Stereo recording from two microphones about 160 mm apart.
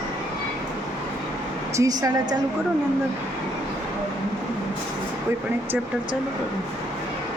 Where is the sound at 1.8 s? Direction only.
20° right (ahead or behind).